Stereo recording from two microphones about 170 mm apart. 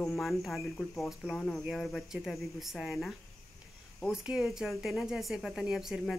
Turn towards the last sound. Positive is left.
turn(degrees=0)  # may be behind; listen again after turning